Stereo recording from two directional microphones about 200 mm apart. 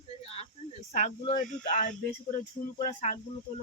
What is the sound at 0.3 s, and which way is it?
Cricket, 35° left (ahead or behind).